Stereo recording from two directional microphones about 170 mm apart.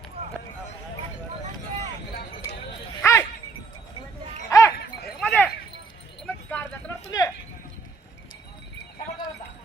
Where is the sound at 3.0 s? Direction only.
15° left (ahead or behind).